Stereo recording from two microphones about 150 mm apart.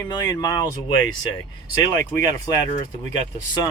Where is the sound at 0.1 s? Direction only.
25° left (ahead or behind).